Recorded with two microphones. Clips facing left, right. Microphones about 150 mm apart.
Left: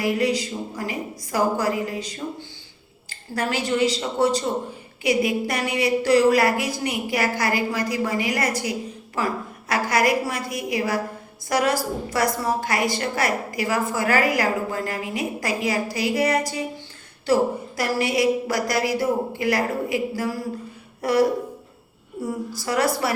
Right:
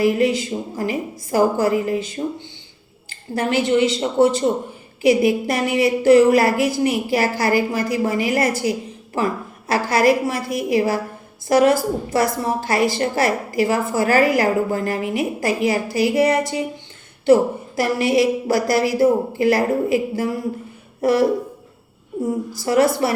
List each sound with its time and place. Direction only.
0.0 s a woman's voice: 25° right (ahead or behind)
22.5 s a woman's voice: 25° right (ahead or behind)